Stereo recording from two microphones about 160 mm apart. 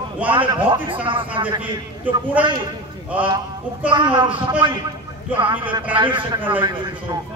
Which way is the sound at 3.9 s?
30° right (ahead or behind).